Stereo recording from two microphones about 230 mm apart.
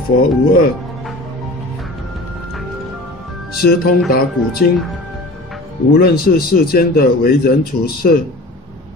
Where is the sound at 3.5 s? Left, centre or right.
Left.